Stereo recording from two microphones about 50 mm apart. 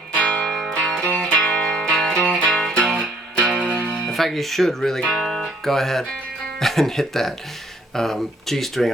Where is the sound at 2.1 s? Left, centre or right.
Left.